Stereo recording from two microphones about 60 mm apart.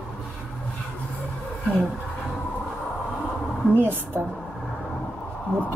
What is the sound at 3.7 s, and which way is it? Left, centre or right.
Speech, right.